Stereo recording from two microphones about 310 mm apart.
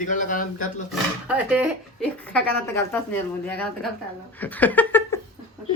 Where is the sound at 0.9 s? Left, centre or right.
Centre.